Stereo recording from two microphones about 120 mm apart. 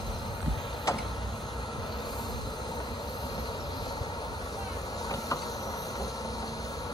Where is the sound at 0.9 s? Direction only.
25° left (ahead or behind).